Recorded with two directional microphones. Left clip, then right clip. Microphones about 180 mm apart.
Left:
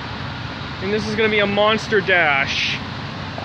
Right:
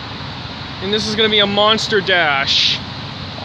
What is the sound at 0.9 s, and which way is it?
Speech, 35° right (ahead or behind).